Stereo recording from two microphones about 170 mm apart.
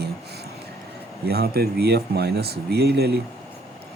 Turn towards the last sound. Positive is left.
turn(degrees=-70)  # may be behind; listen again after turning